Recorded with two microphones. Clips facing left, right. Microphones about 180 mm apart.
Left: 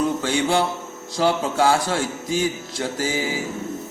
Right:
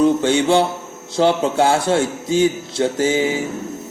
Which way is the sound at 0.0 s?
25° right (ahead or behind).